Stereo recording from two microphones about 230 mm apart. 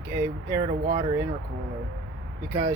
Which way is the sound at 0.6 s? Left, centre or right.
Right.